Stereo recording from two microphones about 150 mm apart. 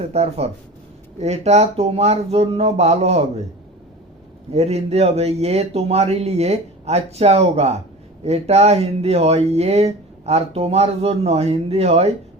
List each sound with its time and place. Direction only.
0.0 s speech: 45° right (ahead or behind)
4.5 s speech: 45° right (ahead or behind)